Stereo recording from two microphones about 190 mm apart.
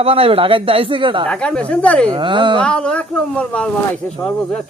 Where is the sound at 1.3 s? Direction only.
5° left (ahead or behind).